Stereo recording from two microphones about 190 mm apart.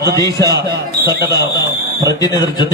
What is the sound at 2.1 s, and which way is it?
Speech, 20° left (ahead or behind).